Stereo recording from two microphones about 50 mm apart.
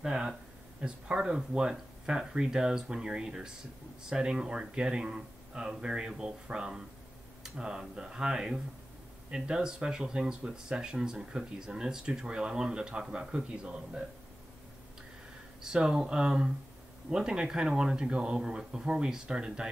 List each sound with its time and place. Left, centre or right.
0.0 s speech: centre
15.6 s speech: centre